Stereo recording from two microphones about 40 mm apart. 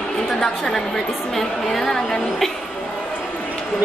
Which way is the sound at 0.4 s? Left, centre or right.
Centre.